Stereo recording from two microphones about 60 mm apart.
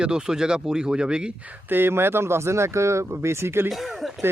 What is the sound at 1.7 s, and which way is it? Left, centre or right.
Speech, right.